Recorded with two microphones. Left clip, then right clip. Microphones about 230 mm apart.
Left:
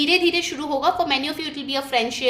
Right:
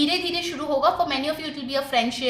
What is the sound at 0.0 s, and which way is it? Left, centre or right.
A woman's voice, left.